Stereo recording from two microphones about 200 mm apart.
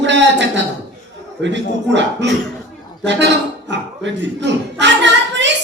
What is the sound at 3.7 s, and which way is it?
Speech, 65° right (ahead or behind).